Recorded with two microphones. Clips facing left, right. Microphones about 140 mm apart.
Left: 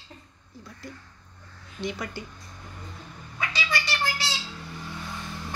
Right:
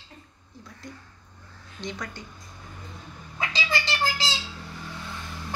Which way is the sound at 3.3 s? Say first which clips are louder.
Right 1 dB; 25° right (ahead or behind).